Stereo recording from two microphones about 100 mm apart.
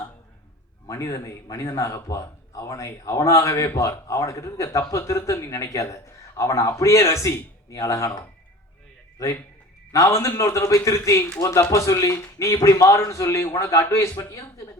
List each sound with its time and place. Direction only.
0.9 s a man's voice: 30° left (ahead or behind)